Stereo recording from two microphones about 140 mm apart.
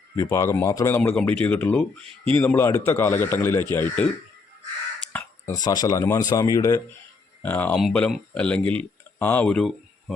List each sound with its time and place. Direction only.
0.2 s a man's voice: 20° left (ahead or behind)
5.1 s a sound: 10° left (ahead or behind)
5.5 s a man's voice: 25° left (ahead or behind); by 9.7 s 5° left (ahead or behind)